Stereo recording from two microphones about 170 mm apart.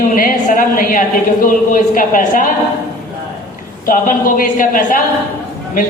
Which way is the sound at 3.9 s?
55° left (ahead or behind).